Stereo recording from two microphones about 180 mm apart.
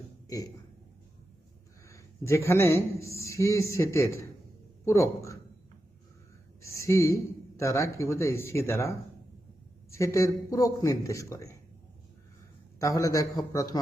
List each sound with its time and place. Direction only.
1.9 s speech: 15° left (ahead or behind)
6.6 s speech: 15° left (ahead or behind)
12.8 s a man's voice: 20° left (ahead or behind)